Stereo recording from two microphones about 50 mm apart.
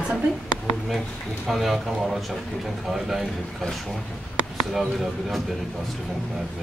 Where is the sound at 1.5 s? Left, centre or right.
Centre.